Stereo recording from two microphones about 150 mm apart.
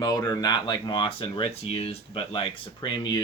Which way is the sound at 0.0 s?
25° left (ahead or behind).